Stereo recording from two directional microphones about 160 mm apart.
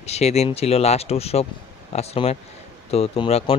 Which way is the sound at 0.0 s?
40° left (ahead or behind).